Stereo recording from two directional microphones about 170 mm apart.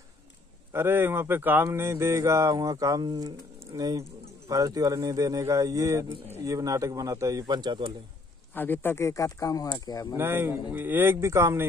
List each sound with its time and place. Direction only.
0.7 s a man's voice: 10° right (ahead or behind)
8.5 s speech: 10° left (ahead or behind)
10.1 s speech: 15° right (ahead or behind)